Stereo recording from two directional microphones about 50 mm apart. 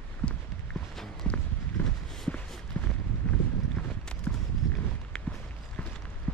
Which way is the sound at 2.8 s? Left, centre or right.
Left.